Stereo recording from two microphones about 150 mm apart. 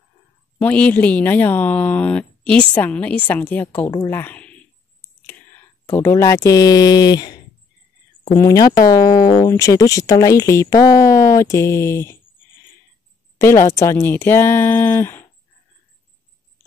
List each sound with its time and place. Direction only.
0.6 s a woman's voice: 10° left (ahead or behind)
5.9 s speech: 15° left (ahead or behind)
13.4 s a woman's voice: 20° left (ahead or behind)